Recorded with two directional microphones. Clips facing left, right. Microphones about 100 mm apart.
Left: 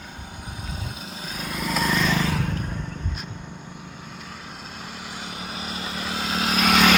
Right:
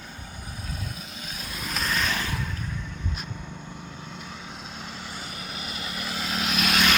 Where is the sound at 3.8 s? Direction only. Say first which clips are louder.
Even; centre (ahead or behind); by 6.5 s 25° left (ahead or behind).